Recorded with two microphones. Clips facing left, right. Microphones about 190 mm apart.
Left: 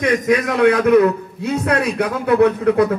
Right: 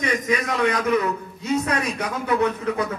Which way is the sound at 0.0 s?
60° left (ahead or behind).